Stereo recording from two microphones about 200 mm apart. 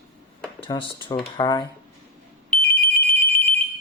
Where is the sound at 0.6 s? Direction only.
25° left (ahead or behind).